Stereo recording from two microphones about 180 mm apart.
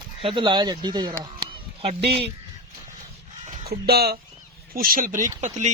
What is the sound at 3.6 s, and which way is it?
Speech, 60° right (ahead or behind).